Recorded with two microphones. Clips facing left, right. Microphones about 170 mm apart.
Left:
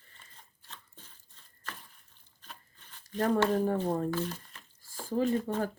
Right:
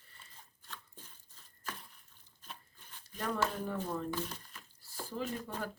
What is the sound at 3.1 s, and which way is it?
Speech, 45° left (ahead or behind).